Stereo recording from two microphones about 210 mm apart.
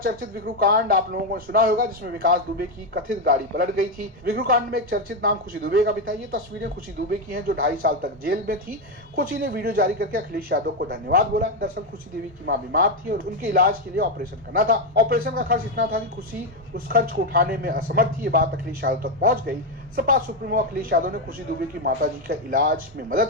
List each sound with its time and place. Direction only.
0.0 s speech: 45° right (ahead or behind)
7.1 s speech: 45° right (ahead or behind)